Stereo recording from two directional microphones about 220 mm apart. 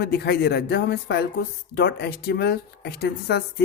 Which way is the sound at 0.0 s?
45° left (ahead or behind).